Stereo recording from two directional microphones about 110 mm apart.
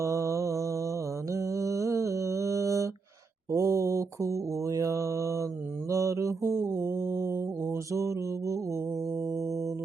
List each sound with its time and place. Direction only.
0.0 s mantra: 30° right (ahead or behind)
9.3 s music: 30° right (ahead or behind)